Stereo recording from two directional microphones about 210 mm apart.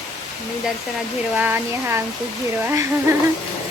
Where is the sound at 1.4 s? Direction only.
10° right (ahead or behind).